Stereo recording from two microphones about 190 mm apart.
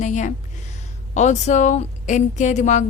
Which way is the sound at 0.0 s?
40° left (ahead or behind).